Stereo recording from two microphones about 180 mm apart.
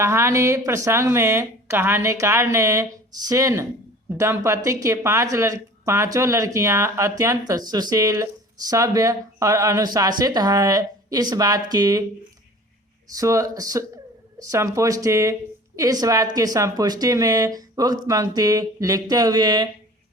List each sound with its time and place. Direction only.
0.0 s speech: 15° right (ahead or behind)
13.1 s speech: 20° right (ahead or behind)